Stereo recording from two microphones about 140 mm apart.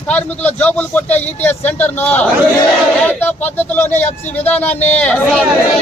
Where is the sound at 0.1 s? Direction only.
10° left (ahead or behind).